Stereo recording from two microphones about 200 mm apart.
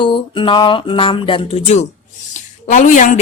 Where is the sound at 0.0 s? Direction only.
25° left (ahead or behind).